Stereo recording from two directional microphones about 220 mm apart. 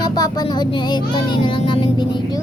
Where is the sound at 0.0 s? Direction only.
20° left (ahead or behind).